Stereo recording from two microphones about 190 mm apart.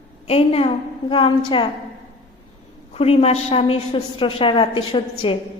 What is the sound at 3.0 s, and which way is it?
A woman's voice, 30° left (ahead or behind).